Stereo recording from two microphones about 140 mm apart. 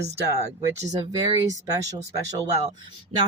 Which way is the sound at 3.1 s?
45° right (ahead or behind).